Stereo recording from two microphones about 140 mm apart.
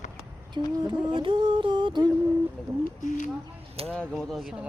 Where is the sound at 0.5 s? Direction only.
35° right (ahead or behind).